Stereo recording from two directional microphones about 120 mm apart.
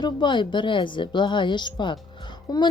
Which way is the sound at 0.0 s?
40° left (ahead or behind).